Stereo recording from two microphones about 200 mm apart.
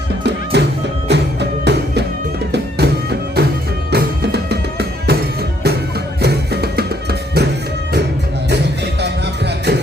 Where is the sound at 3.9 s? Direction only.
55° right (ahead or behind).